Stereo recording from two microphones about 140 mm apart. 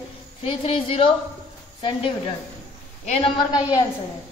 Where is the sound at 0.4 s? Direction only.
40° left (ahead or behind).